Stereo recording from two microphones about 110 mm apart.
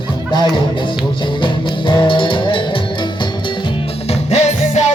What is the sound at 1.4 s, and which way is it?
Music, 45° left (ahead or behind).